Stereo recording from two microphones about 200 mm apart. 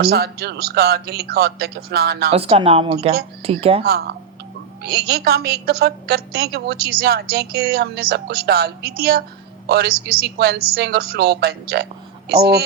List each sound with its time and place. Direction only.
0.0 s a woman's voice: 50° right (ahead or behind)
2.3 s a woman's voice: 30° right (ahead or behind)
3.8 s a woman's voice: 50° right (ahead or behind)